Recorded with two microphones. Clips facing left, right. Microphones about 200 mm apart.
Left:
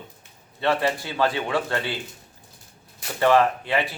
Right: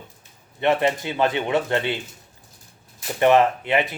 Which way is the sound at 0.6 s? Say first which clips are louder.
Right 3 dB; 20° right (ahead or behind).